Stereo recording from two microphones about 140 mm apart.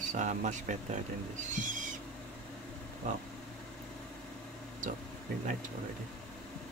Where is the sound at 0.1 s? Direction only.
65° right (ahead or behind).